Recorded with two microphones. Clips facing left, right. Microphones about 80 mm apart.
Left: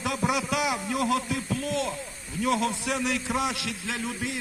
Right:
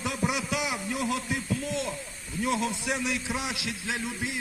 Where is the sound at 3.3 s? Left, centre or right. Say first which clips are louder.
Left 5 dB; left.